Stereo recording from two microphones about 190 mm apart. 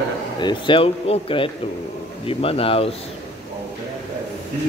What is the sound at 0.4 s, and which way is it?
Speech, 25° left (ahead or behind).